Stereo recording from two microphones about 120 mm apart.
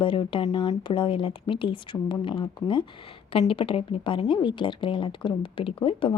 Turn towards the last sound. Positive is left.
turn(degrees=45)  # may be behind; listen again after turning